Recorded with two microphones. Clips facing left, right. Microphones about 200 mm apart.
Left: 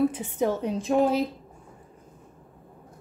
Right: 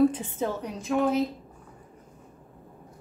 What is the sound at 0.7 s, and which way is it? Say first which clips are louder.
Speech: left 1 dB; 30° left (ahead or behind).